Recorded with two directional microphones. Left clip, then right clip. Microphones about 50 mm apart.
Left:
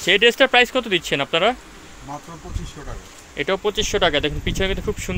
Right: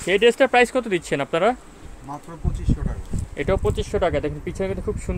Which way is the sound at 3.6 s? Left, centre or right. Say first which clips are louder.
Left 3 dB; centre.